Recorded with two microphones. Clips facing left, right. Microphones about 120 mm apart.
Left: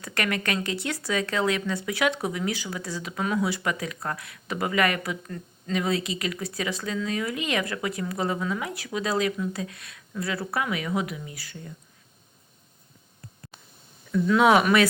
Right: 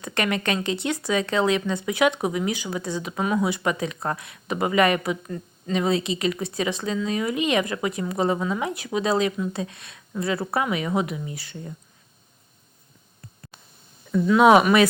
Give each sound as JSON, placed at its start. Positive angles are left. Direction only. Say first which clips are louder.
{"t": 0.0, "sound": "speech", "louder": "right 3 dB", "side_deg": -20}
{"t": 14.3, "sound": "speech", "louder": "right 4 dB", "side_deg": -20}